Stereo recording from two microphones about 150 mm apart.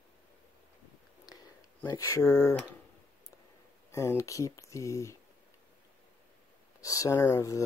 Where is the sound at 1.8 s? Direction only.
20° left (ahead or behind).